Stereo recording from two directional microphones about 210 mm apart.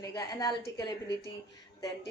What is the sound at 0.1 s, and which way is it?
Speech, 20° left (ahead or behind).